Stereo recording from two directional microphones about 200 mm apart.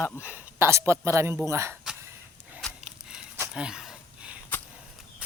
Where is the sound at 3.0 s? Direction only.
5° right (ahead or behind).